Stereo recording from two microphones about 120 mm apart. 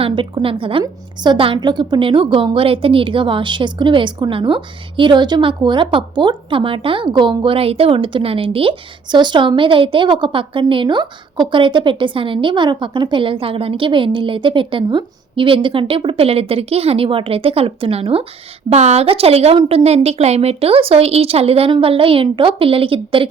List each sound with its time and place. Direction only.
0.0 s a woman's voice: 45° right (ahead or behind)
18.7 s a woman's voice: 65° right (ahead or behind); by 23.3 s 50° right (ahead or behind)